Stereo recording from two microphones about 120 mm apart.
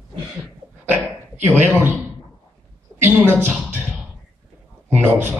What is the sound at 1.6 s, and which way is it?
Speech, 15° right (ahead or behind).